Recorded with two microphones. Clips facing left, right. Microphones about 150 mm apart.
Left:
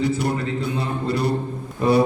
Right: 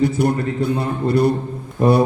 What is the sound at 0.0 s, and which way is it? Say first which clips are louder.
A man's voice: right 4 dB; 50° right (ahead or behind).